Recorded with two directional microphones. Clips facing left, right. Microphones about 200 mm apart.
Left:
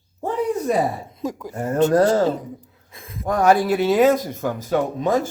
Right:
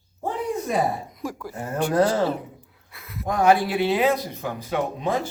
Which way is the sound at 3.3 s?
40° left (ahead or behind).